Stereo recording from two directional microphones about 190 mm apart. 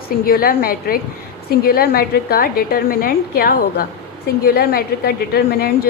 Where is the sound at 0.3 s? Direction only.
50° left (ahead or behind).